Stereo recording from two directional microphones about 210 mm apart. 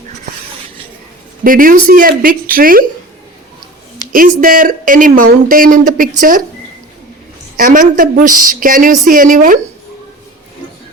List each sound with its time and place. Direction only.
1.5 s a woman's voice: 40° right (ahead or behind)
4.1 s a woman's voice: 40° right (ahead or behind)
7.5 s a woman's voice: 40° right (ahead or behind)